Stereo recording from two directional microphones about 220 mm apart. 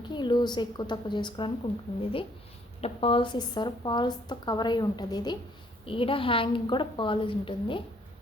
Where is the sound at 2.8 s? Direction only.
25° left (ahead or behind).